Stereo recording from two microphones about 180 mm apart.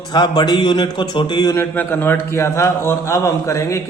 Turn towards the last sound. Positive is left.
turn(degrees=15)  # may be behind; listen again after turning